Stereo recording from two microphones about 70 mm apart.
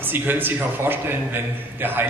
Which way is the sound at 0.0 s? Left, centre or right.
Right.